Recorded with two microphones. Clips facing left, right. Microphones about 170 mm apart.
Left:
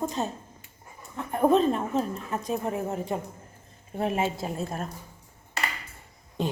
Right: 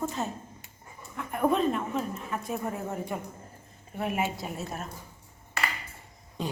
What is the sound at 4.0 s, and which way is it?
Speech, 30° left (ahead or behind).